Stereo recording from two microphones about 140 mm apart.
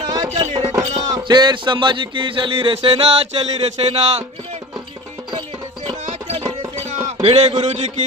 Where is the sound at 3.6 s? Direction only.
45° right (ahead or behind).